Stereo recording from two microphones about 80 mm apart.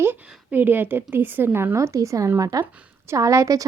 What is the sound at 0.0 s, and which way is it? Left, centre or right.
A woman's voice, right.